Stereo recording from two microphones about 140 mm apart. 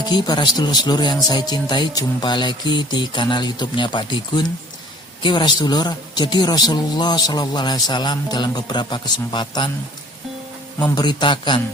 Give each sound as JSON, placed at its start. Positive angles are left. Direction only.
{"t": 0.0, "sound": "speech", "side_deg": 30}
{"t": 10.8, "sound": "speech", "side_deg": 30}